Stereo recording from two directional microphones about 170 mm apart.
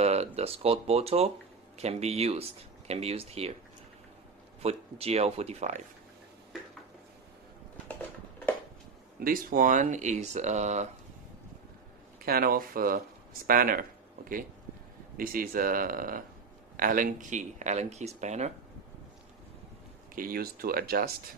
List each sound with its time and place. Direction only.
0.0 s speech: 40° right (ahead or behind)
4.6 s speech: 35° right (ahead or behind)
9.2 s speech: 55° right (ahead or behind)
12.2 s speech: 60° right (ahead or behind)
15.1 s speech: 55° right (ahead or behind)
20.2 s speech: 60° right (ahead or behind)